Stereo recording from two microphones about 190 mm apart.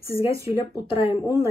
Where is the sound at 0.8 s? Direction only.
30° left (ahead or behind).